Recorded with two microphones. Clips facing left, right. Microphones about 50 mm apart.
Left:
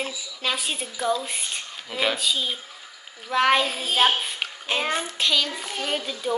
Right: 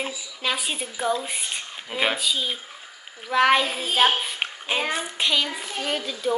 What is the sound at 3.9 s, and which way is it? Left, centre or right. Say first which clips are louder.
Child singing: right 1 dB; centre.